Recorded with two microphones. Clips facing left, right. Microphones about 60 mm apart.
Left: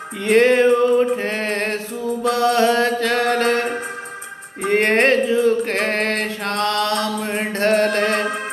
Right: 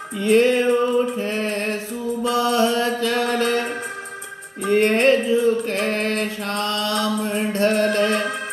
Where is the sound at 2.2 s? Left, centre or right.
Left.